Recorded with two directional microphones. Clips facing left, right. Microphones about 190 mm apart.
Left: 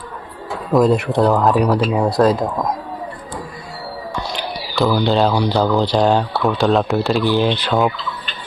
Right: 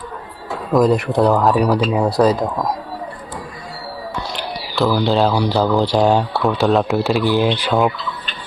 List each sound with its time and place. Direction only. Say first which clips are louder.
0.7 s speech: even; centre (ahead or behind)
4.4 s a sound: even; centre (ahead or behind)
5.4 s speech: even; centre (ahead or behind)
7.4 s fowl: even; 10° right (ahead or behind)
7.7 s speech: right 1 dB; centre (ahead or behind)